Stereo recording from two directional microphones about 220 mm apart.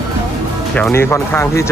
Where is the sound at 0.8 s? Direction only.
10° left (ahead or behind).